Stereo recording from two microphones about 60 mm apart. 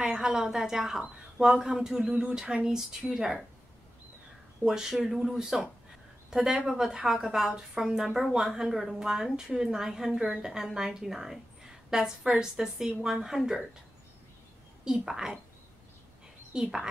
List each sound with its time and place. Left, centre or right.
0.0 s speech: centre
2.0 s speech: right
2.3 s a woman's voice: centre
4.6 s a woman's voice: centre
14.9 s a woman's voice: centre
16.5 s a woman's voice: centre